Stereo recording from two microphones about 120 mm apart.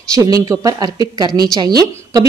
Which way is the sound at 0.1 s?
30° right (ahead or behind).